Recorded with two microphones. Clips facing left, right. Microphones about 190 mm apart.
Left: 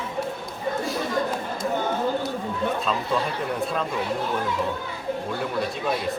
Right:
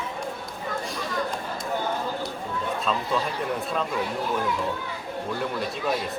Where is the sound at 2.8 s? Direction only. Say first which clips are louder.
Left 1 dB; centre (ahead or behind).